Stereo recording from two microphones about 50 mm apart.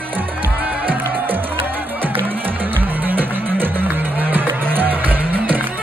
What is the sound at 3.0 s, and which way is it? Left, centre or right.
Music, right.